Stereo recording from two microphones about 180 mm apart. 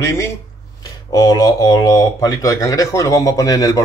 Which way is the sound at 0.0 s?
15° left (ahead or behind).